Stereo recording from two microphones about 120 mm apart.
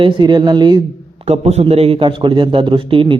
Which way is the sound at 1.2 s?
65° right (ahead or behind).